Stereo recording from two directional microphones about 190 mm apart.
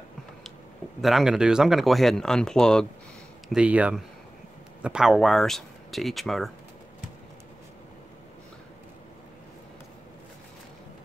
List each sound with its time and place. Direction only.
1.0 s speech: centre (ahead or behind)